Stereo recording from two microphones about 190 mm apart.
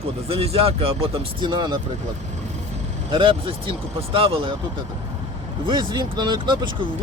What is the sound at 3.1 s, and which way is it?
Speech, 25° right (ahead or behind).